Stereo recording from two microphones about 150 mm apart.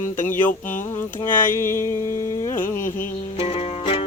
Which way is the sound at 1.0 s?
15° left (ahead or behind).